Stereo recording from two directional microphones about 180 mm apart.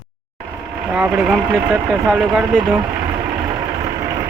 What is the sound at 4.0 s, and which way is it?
Vehicle, 15° right (ahead or behind).